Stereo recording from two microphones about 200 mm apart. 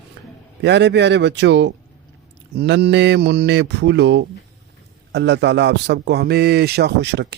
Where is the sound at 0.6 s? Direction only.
60° right (ahead or behind).